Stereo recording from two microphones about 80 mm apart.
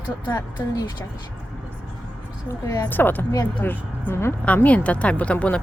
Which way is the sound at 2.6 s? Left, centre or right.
Left.